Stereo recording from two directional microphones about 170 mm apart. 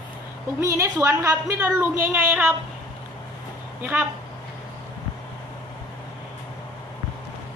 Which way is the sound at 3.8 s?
10° right (ahead or behind).